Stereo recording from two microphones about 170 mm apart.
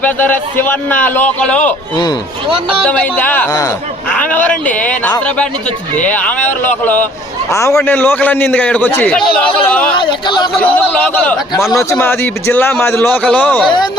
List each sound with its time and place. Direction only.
0.0 s a man's voice: 10° left (ahead or behind)
2.9 s a man's voice: 10° left (ahead or behind)
10.0 s speech: 30° left (ahead or behind)
10.8 s a man's voice: 10° left (ahead or behind)